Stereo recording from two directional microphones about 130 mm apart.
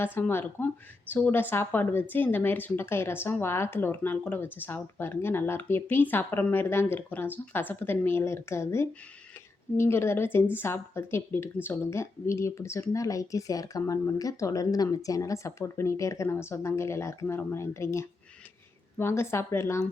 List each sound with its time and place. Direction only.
0.0 s a woman's voice: 15° left (ahead or behind)